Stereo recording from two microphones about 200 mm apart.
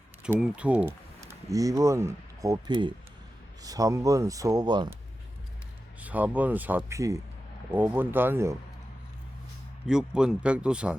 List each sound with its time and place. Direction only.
0.2 s speech: 5° right (ahead or behind); by 4.9 s 20° right (ahead or behind)
6.0 s speech: 5° right (ahead or behind)
9.8 s speech: 5° right (ahead or behind)